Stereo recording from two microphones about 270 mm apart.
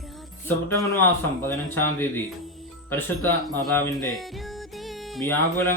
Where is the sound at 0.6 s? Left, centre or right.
Centre.